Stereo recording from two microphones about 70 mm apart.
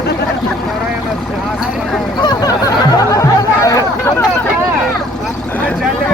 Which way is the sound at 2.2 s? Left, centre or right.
Left.